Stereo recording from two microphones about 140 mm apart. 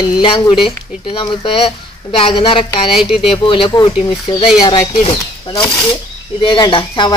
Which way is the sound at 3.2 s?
35° left (ahead or behind).